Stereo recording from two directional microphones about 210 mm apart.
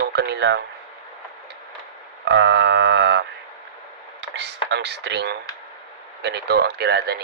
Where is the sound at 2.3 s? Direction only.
55° right (ahead or behind).